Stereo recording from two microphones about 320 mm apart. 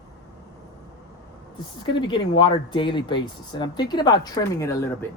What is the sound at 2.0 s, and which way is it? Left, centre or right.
A man's voice, centre.